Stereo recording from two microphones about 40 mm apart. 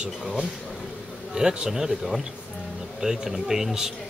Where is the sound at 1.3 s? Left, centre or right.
Centre.